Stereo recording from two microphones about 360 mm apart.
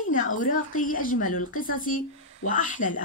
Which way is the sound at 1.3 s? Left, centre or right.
Left.